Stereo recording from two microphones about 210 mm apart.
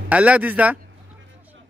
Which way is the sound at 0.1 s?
5° right (ahead or behind).